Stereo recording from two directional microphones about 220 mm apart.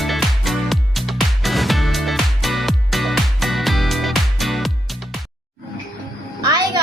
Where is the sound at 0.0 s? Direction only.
Centre (ahead or behind).